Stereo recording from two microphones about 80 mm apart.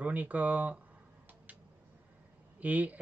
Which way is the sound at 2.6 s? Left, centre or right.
Centre.